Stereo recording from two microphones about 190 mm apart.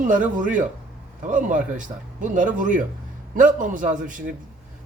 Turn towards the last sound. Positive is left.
turn(degrees=-45)  # may be behind; listen again after turning